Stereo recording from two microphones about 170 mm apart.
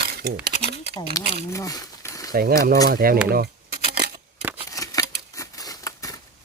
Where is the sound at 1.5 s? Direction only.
20° left (ahead or behind).